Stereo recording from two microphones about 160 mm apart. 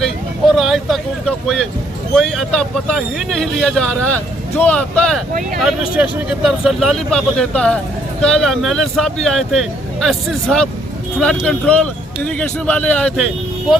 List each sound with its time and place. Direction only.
0.0 s vehicle: centre (ahead or behind)
2.1 s speech: 5° left (ahead or behind)
5.3 s speech: 60° right (ahead or behind)
6.0 s speech: 5° right (ahead or behind)